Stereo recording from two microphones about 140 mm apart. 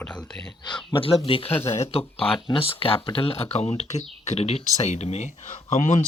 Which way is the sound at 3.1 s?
45° left (ahead or behind).